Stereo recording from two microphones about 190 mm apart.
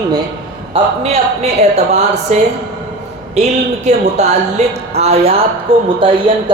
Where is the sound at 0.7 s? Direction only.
30° right (ahead or behind).